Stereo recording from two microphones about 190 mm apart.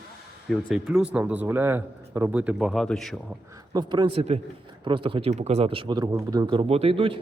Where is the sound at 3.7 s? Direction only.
20° right (ahead or behind).